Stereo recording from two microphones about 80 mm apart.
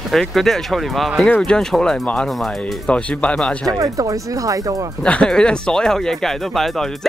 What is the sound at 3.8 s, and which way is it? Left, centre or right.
Speech, right.